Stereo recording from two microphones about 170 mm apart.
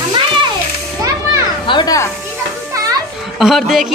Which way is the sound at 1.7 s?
25° left (ahead or behind).